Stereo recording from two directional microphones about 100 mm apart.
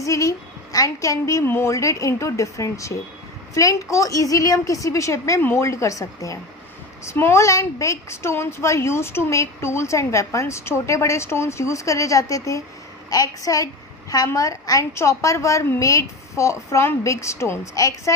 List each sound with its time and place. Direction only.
0.0 s a woman's voice: 35° left (ahead or behind)